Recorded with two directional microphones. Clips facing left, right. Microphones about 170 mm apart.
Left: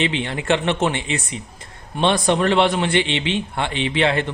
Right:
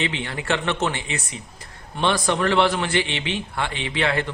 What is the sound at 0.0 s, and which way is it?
Speech, 20° left (ahead or behind).